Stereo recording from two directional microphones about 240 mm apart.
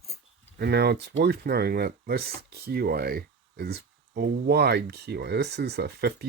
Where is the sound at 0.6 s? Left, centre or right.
Right.